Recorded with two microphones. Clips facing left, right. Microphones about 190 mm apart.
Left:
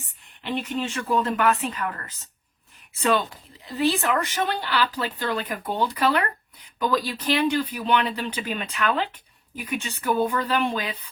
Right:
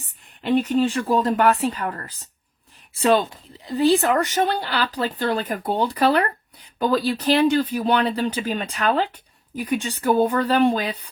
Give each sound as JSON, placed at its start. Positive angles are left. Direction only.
{"t": 0.0, "sound": "speech", "side_deg": -35}